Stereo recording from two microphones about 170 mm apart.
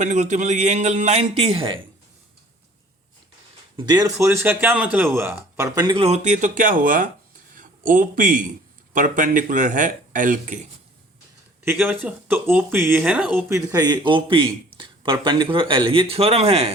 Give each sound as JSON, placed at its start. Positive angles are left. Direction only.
{"t": 0.0, "sound": "speech", "side_deg": -45}
{"t": 3.8, "sound": "a man's voice", "side_deg": -25}
{"t": 11.6, "sound": "speech", "side_deg": -10}
{"t": 13.5, "sound": "a man's voice", "side_deg": -20}